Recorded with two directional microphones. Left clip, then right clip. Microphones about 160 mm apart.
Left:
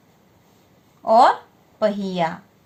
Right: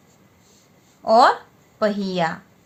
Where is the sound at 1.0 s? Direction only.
35° right (ahead or behind).